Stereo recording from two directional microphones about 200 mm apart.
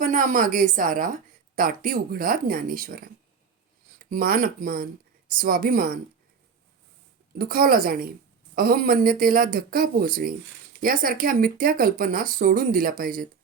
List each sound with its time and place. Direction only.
0.0 s a woman's voice: 40° right (ahead or behind)
7.3 s a woman's voice: 50° right (ahead or behind)